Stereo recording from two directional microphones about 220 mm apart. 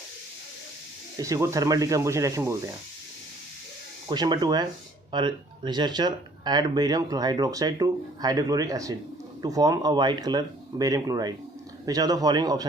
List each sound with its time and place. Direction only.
1.2 s speech: 15° right (ahead or behind)
4.1 s speech: 20° right (ahead or behind)